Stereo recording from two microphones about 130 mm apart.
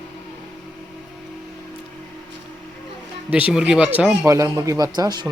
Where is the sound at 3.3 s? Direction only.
10° right (ahead or behind).